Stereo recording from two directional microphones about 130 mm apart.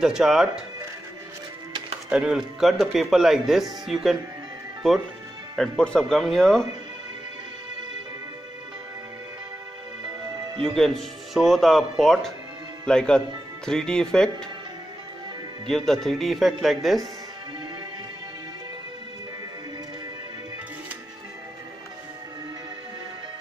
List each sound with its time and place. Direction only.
0.0 s speech: 5° right (ahead or behind)
2.0 s speech: 5° right (ahead or behind)
5.6 s speech: 5° left (ahead or behind)
10.3 s music: 30° right (ahead or behind)
10.8 s speech: centre (ahead or behind)
15.7 s speech: centre (ahead or behind)